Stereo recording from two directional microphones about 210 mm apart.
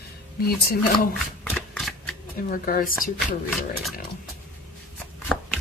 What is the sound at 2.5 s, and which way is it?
Speech, 40° left (ahead or behind).